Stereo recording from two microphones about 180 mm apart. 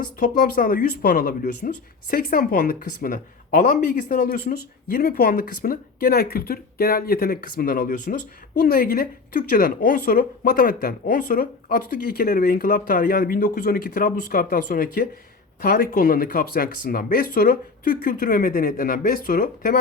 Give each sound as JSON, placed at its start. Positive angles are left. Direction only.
{"t": 0.2, "sound": "speech", "side_deg": 55}